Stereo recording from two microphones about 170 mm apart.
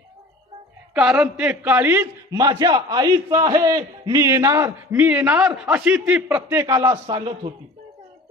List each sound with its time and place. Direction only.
0.9 s a man's voice: 5° right (ahead or behind)
4.9 s a man's voice: 10° right (ahead or behind)